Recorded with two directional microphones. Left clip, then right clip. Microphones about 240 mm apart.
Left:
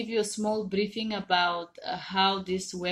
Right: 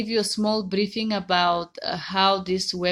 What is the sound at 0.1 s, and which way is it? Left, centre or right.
Speech, right.